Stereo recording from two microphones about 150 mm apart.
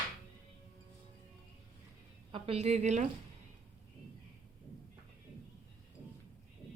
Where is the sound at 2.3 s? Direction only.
40° right (ahead or behind).